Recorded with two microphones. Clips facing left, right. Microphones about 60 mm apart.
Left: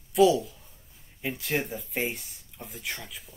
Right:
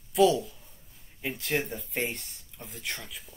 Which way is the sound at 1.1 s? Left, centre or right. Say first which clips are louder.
Left 1 dB; centre.